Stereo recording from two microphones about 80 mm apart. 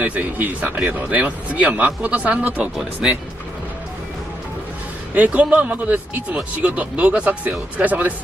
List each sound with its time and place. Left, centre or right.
0.0 s speech: right
5.1 s speech: centre